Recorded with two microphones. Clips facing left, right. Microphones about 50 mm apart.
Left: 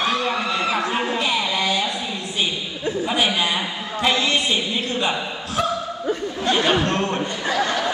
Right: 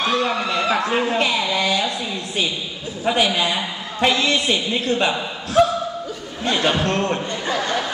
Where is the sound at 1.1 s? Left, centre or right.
Right.